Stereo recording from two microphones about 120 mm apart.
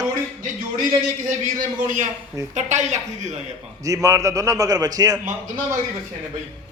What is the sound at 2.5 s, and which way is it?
Speech, 75° right (ahead or behind).